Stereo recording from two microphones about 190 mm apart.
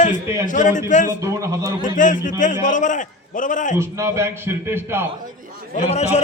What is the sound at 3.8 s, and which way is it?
A man's voice, 15° right (ahead or behind).